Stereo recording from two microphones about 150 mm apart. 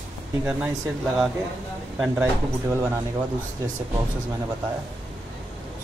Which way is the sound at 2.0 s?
15° right (ahead or behind).